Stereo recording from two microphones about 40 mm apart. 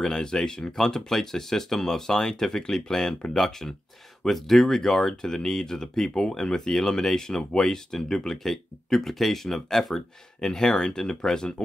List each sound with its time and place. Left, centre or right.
0.0 s speech: centre